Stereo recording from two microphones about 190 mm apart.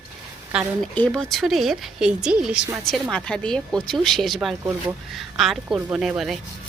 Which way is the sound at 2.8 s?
Centre (ahead or behind).